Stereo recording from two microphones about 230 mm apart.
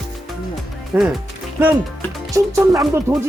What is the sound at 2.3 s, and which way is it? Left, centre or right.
Speech, centre.